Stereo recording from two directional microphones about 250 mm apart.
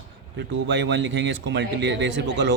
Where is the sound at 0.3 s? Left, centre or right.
Right.